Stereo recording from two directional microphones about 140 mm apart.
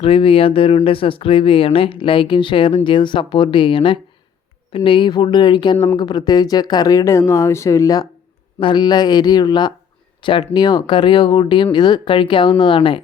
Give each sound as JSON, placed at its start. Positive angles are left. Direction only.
{"t": 0.0, "sound": "speech", "side_deg": 40}
{"t": 8.5, "sound": "speech", "side_deg": 35}